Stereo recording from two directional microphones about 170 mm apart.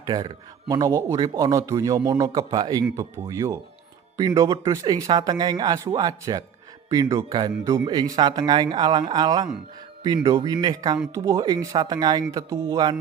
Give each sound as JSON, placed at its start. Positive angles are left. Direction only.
{"t": 0.0, "sound": "speech", "side_deg": -25}